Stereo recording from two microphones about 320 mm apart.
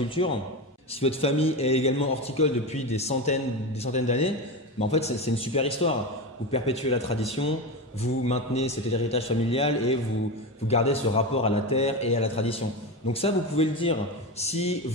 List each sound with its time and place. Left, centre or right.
0.2 s a man's voice: centre